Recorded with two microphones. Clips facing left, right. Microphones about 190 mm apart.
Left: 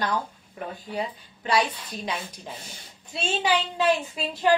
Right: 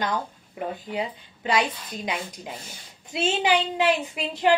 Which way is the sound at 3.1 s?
20° right (ahead or behind).